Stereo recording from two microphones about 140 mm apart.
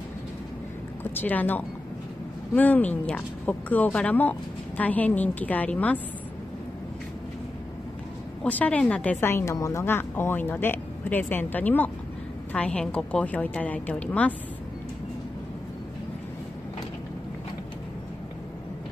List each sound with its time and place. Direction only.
1.0 s speech: 15° left (ahead or behind)
8.5 s speech: 10° left (ahead or behind)